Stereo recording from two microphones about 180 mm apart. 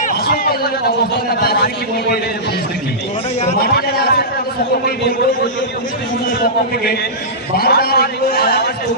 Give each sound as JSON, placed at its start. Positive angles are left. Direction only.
{"t": 0.0, "sound": "a sound", "side_deg": 55}
{"t": 1.4, "sound": "a man's voice", "side_deg": 55}
{"t": 3.6, "sound": "a man's voice", "side_deg": 55}
{"t": 7.5, "sound": "a man's voice", "side_deg": 60}